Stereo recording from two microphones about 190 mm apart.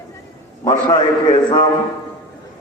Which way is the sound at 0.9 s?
25° left (ahead or behind).